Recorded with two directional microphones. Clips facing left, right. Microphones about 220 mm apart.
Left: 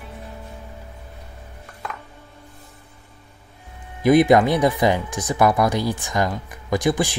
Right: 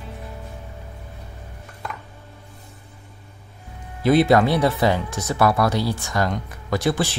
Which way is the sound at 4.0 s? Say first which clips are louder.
Left 2 dB; 15° left (ahead or behind).